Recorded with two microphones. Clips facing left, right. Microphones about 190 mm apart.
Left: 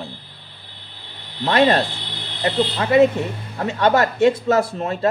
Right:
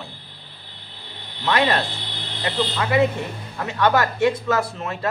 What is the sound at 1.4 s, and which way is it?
Speech, 35° left (ahead or behind).